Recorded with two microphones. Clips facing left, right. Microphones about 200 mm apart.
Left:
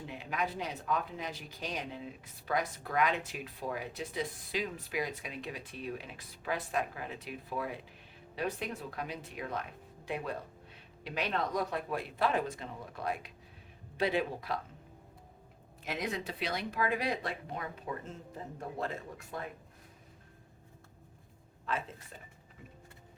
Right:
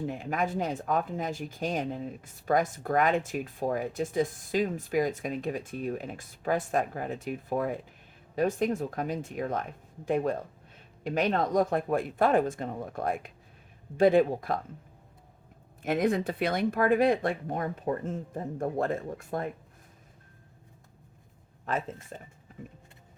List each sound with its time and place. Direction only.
0.0 s speech: 45° right (ahead or behind)
15.8 s speech: 50° right (ahead or behind)
22.1 s speech: 45° right (ahead or behind)